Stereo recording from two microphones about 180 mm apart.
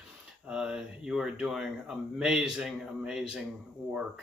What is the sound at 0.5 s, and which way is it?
Speech, 5° right (ahead or behind).